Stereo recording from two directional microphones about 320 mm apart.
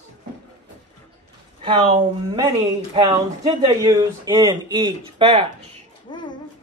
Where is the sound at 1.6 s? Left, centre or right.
Centre.